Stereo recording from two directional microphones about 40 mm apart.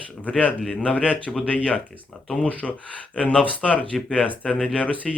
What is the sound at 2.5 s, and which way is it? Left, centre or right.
Speech, left.